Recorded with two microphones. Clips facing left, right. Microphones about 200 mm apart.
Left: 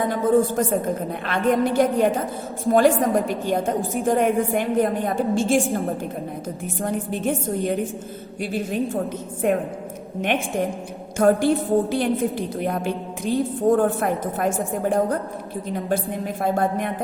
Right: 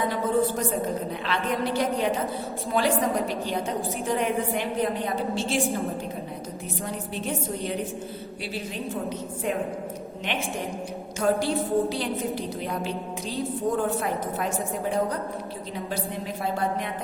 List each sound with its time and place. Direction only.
0.0 s a woman's voice: 45° left (ahead or behind)
11.2 s a woman's voice: 50° left (ahead or behind)
16.4 s a woman's voice: 50° left (ahead or behind)